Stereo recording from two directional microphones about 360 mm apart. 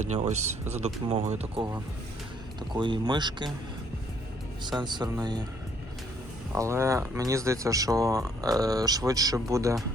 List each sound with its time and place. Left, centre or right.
0.0 s speech: centre
2.7 s speech: centre
4.8 s speech: centre
6.5 s speech: centre